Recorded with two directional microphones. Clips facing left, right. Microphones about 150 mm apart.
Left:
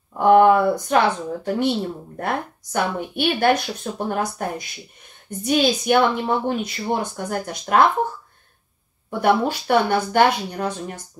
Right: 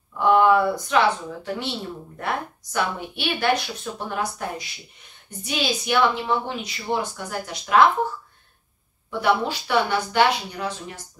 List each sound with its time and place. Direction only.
0.2 s speech: 50° left (ahead or behind)
9.2 s speech: 50° left (ahead or behind)